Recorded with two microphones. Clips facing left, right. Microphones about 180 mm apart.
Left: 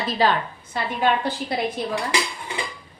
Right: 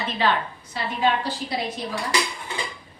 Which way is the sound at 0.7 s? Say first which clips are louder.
Left 3 dB; 50° left (ahead or behind).